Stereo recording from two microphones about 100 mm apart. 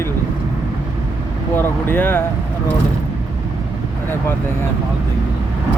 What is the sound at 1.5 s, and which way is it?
Speech, 20° left (ahead or behind).